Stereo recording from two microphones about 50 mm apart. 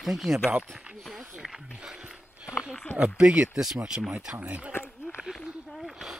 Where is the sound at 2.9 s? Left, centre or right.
Centre.